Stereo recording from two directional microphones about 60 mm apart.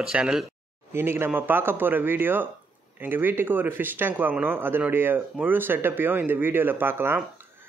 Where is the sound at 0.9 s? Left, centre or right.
Right.